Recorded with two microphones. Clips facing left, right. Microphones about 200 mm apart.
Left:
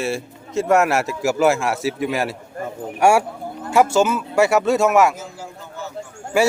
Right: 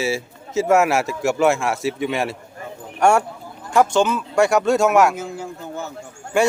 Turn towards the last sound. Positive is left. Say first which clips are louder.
# even
turn(degrees=5)  # may be behind; listen again after turning